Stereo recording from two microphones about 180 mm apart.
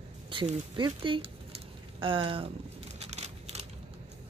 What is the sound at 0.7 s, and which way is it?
A woman's voice, 25° right (ahead or behind).